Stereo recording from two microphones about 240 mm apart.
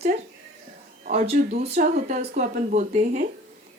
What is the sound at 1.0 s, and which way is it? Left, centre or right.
Speech, right.